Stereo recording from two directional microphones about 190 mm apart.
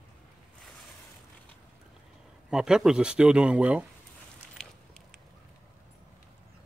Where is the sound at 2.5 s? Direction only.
Centre (ahead or behind).